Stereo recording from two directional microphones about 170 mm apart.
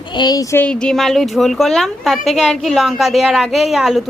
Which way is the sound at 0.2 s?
20° left (ahead or behind).